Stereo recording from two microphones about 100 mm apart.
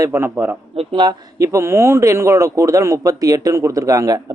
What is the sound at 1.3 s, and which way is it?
A man's voice, 30° right (ahead or behind).